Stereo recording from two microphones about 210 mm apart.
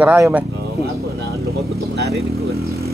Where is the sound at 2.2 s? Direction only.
30° right (ahead or behind).